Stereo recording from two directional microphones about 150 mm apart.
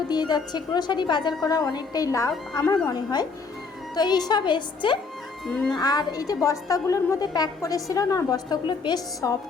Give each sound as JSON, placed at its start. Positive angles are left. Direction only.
{"t": 0.1, "sound": "a woman's voice", "side_deg": 30}